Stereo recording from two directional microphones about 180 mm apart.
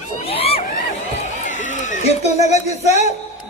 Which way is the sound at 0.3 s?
35° left (ahead or behind).